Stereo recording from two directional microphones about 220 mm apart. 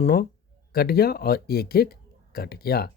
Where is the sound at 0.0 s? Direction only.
40° left (ahead or behind).